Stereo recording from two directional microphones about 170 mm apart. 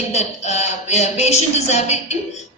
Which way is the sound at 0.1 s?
40° left (ahead or behind).